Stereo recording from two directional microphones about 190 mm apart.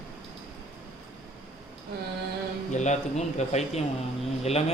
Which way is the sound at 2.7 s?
40° left (ahead or behind).